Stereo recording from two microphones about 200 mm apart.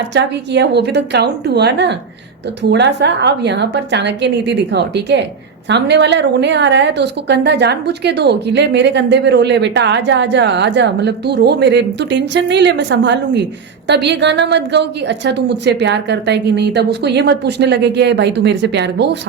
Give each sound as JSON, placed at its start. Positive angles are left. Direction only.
{"t": 0.1, "sound": "a woman's voice", "side_deg": -60}